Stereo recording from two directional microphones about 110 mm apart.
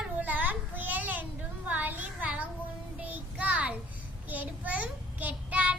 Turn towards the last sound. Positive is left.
turn(degrees=-10)  # may be behind; listen again after turning